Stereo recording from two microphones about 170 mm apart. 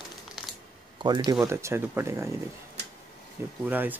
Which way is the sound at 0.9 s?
25° right (ahead or behind).